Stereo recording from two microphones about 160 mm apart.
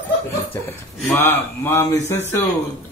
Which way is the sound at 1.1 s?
15° left (ahead or behind).